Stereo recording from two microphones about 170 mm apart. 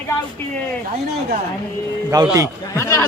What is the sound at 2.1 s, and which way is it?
Speech, 20° right (ahead or behind).